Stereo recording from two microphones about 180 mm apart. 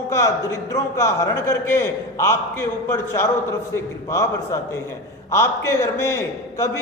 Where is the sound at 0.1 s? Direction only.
15° left (ahead or behind).